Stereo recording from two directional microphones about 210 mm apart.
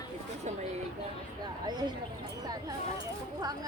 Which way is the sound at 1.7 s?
20° right (ahead or behind).